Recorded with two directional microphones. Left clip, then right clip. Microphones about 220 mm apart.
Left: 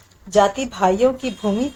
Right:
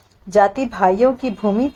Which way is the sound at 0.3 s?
25° right (ahead or behind).